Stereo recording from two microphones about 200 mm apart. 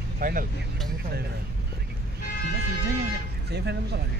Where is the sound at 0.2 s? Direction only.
45° right (ahead or behind).